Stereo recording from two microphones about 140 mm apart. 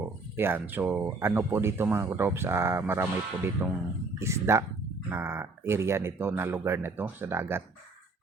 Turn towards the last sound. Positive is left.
turn(degrees=-15)  # may be behind; listen again after turning